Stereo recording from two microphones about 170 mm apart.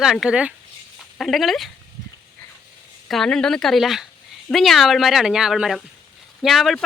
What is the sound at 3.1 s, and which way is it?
Speech, 5° left (ahead or behind).